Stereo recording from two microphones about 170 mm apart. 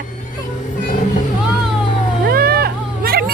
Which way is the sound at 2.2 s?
65° right (ahead or behind).